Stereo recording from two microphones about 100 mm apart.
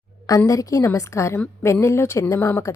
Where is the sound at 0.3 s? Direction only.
35° left (ahead or behind).